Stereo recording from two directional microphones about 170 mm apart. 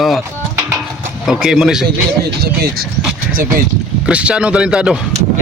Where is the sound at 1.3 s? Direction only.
Centre (ahead or behind).